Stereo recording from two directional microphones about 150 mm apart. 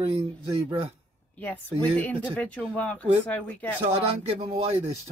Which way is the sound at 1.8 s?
10° left (ahead or behind).